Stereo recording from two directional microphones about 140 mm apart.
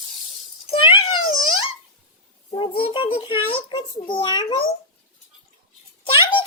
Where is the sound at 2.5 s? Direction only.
40° left (ahead or behind).